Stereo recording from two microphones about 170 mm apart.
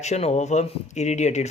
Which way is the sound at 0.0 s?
40° left (ahead or behind).